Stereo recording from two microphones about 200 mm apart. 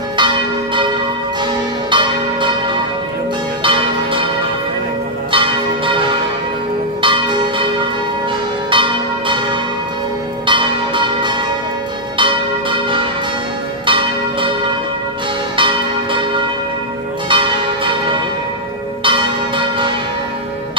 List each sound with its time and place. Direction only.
0.2 s church bell: 25° right (ahead or behind)
5.3 s church bell: 25° right (ahead or behind)
8.6 s church bell: 25° right (ahead or behind)
15.5 s church bell: 25° right (ahead or behind)
19.0 s church bell: 25° right (ahead or behind)